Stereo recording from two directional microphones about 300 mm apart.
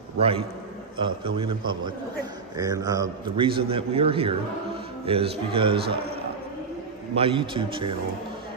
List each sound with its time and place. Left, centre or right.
0.9 s a man's voice: centre
2.5 s a man's voice: centre
7.2 s a man's voice: centre